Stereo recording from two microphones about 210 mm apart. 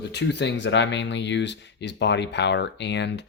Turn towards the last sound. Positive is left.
turn(degrees=55)  # may be behind; listen again after turning